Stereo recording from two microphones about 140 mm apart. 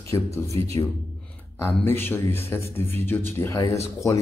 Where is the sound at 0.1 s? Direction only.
20° left (ahead or behind).